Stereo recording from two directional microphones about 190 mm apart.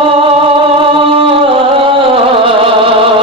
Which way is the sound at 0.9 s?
30° right (ahead or behind).